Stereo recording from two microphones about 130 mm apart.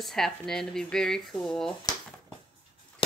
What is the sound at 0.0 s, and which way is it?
A woman's voice, 5° left (ahead or behind).